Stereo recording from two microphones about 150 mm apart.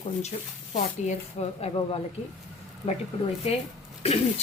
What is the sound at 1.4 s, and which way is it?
Speech, 45° left (ahead or behind).